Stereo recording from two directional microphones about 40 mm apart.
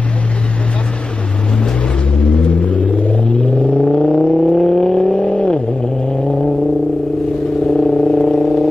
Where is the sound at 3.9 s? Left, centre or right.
Centre.